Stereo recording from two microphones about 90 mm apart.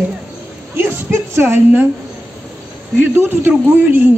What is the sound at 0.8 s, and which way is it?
Speech, 25° right (ahead or behind).